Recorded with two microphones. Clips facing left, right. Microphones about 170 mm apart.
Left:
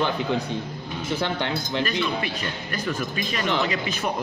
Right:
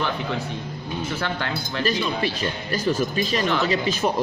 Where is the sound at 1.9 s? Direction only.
35° right (ahead or behind).